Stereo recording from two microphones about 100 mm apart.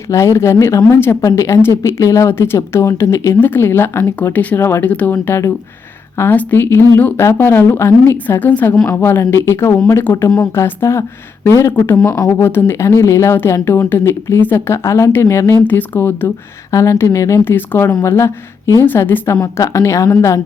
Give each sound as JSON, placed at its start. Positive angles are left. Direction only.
{"t": 0.1, "sound": "speech", "side_deg": 30}
{"t": 5.1, "sound": "speech", "side_deg": 30}
{"t": 12.5, "sound": "speech", "side_deg": 20}